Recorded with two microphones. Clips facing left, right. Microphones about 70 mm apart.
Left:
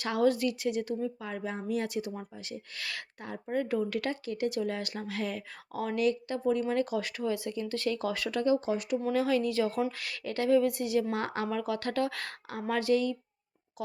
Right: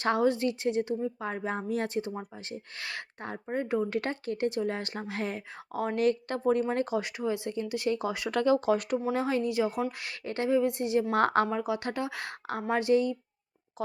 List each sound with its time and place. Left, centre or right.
0.0 s speech: right
6.9 s speech: right
8.4 s speech: right
9.1 s speech: right
11.1 s a woman's voice: right
11.5 s speech: right